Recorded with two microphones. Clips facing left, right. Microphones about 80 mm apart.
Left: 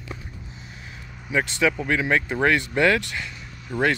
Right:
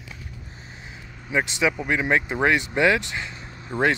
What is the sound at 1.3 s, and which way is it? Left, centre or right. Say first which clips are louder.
Speech: left 1 dB; centre.